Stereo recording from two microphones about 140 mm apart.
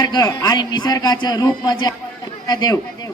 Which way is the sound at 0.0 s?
30° left (ahead or behind).